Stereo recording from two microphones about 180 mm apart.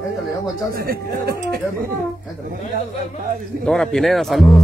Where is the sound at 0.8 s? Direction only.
55° right (ahead or behind).